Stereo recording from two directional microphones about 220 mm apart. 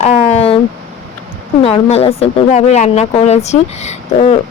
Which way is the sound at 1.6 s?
30° left (ahead or behind).